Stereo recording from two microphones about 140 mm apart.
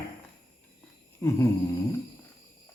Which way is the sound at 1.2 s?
20° left (ahead or behind).